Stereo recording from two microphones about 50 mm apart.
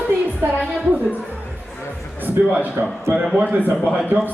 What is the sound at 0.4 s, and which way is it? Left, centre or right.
Speech, right.